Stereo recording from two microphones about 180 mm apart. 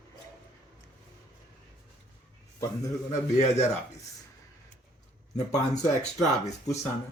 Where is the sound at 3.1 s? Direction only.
40° left (ahead or behind).